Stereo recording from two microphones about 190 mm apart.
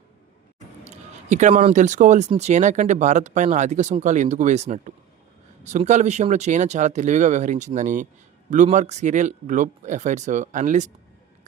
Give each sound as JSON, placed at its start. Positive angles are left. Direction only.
{"t": 0.9, "sound": "speech", "side_deg": -40}